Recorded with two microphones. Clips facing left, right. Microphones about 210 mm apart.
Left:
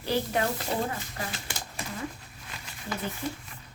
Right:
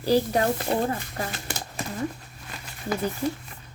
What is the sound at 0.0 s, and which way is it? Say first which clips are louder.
Speech: right 6 dB; 35° right (ahead or behind).